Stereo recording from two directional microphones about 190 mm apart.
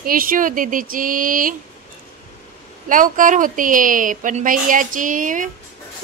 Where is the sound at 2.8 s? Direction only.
45° right (ahead or behind).